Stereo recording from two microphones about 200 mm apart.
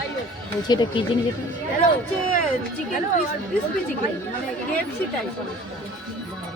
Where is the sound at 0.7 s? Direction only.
20° left (ahead or behind).